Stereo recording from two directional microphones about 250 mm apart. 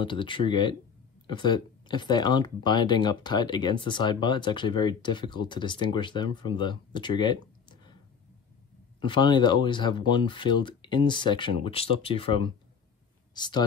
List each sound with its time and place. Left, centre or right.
0.0 s speech: centre
9.0 s speech: centre